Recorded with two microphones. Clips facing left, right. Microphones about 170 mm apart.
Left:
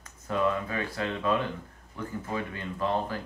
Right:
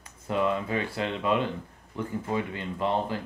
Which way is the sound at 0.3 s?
20° right (ahead or behind).